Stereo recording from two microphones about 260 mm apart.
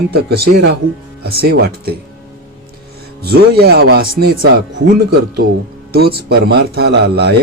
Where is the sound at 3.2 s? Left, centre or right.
Right.